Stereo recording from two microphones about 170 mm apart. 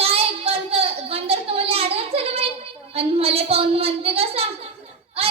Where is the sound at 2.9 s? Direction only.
35° right (ahead or behind).